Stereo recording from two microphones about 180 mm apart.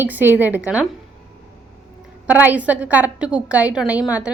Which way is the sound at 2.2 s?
10° right (ahead or behind).